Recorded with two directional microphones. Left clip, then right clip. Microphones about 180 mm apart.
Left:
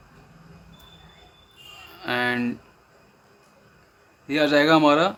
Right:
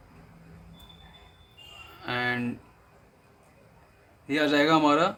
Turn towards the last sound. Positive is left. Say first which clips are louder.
# left 4 dB
turn(degrees=20)  # may be behind; listen again after turning